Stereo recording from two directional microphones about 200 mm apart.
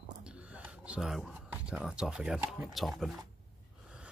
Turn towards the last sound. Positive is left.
turn(degrees=0)  # may be behind; listen again after turning